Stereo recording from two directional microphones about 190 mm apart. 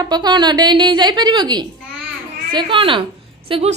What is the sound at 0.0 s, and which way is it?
A woman's voice, 20° right (ahead or behind).